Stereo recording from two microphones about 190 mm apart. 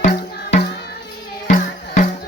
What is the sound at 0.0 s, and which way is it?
Music, 40° left (ahead or behind).